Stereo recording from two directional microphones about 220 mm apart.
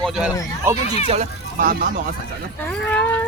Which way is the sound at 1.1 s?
35° right (ahead or behind).